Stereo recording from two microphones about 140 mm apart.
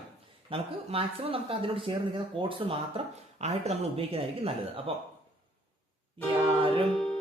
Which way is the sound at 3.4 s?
50° right (ahead or behind).